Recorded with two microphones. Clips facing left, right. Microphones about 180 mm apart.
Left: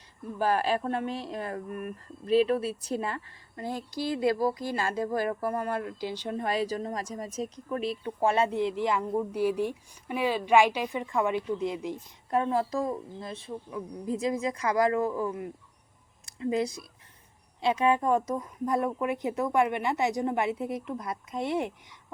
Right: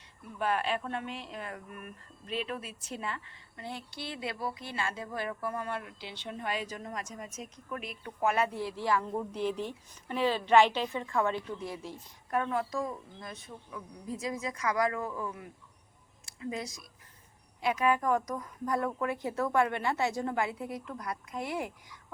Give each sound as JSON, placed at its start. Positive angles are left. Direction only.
{"t": 0.3, "sound": "a woman's voice", "side_deg": 35}